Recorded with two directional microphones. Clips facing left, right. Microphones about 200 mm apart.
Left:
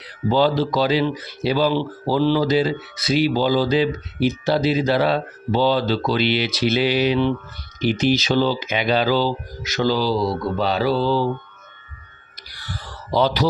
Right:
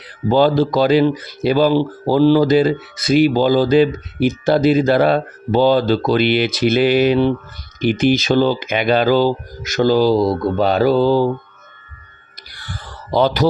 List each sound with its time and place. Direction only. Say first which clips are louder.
0.3 s speech: right 4 dB; 50° right (ahead or behind)
7.8 s speech: right 4 dB; 55° right (ahead or behind)
12.5 s a sound: right 1 dB; 50° right (ahead or behind)